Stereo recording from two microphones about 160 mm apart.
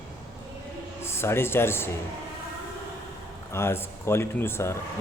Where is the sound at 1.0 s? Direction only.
15° left (ahead or behind).